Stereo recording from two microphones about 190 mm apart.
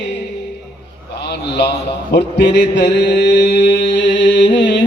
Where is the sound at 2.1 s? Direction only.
60° left (ahead or behind).